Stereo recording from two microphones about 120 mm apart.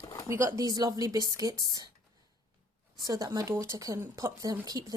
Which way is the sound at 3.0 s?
30° right (ahead or behind).